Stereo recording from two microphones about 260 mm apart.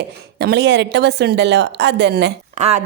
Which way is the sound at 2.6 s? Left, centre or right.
Right.